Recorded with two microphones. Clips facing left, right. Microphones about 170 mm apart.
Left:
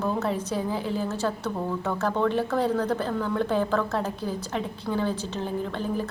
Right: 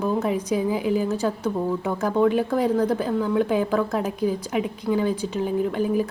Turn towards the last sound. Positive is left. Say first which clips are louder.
# right 6 dB
turn(degrees=-10)  # may be behind; listen again after turning